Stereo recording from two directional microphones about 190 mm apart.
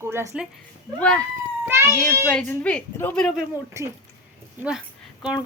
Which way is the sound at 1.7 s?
15° right (ahead or behind).